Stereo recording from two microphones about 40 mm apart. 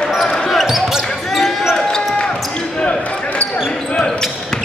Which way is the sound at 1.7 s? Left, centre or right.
Left.